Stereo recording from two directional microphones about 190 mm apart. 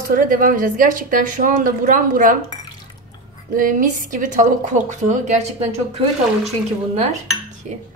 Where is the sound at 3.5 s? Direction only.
45° right (ahead or behind).